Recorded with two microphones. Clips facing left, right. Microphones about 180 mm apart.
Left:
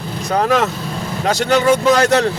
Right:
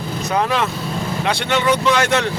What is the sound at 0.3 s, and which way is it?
Speech, 40° left (ahead or behind).